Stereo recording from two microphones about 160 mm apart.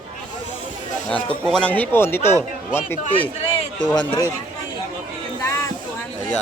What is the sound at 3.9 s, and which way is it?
Speech, 25° left (ahead or behind).